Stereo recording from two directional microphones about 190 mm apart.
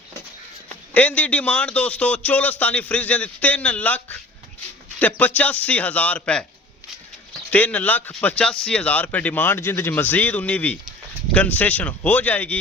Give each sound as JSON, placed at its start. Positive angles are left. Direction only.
{"t": 0.9, "sound": "speech", "side_deg": 10}
{"t": 7.5, "sound": "speech", "side_deg": 10}